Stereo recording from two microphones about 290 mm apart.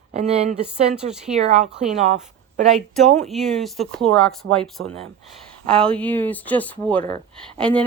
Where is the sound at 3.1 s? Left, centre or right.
Centre.